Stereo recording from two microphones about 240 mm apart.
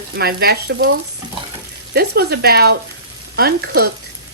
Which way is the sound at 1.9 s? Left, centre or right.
Right.